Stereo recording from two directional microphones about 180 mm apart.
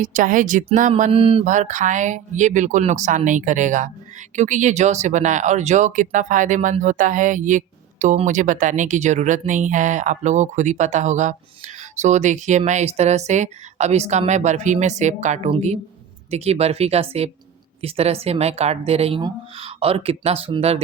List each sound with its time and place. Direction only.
0.0 s speech: 45° right (ahead or behind)
1.1 s speech: 30° right (ahead or behind)
1.5 s speech: 45° right (ahead or behind)